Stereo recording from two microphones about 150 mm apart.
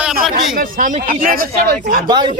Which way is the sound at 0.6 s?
60° right (ahead or behind).